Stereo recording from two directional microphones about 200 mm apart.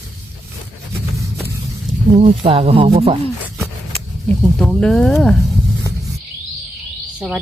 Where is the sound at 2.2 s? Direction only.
30° right (ahead or behind).